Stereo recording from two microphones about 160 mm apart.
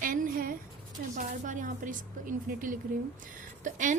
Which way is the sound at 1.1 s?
55° right (ahead or behind).